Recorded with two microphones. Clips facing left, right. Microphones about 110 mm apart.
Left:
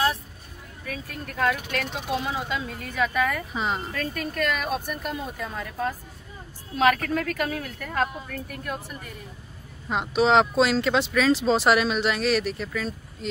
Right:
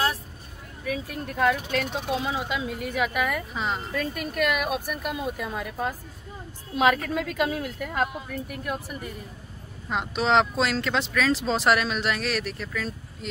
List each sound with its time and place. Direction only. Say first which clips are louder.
0.8 s speech: right 5 dB; 15° right (ahead or behind)
3.5 s speech: left 1 dB; 5° left (ahead or behind)
3.9 s speech: right 1 dB; 10° right (ahead or behind)
9.8 s speech: left 3 dB; centre (ahead or behind)